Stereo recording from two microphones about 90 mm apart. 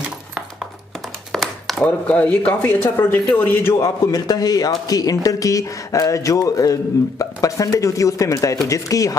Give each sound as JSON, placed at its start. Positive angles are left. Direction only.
{"t": 1.3, "sound": "a sound", "side_deg": 0}
{"t": 1.8, "sound": "a man's voice", "side_deg": 15}
{"t": 3.8, "sound": "speech", "side_deg": 40}